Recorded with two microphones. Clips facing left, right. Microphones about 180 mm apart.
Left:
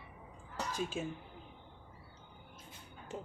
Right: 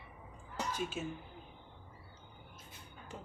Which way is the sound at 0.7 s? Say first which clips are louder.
Left 2 dB; 30° left (ahead or behind).